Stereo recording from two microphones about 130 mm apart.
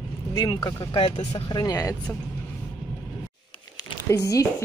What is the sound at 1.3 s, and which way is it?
Speech, 30° left (ahead or behind).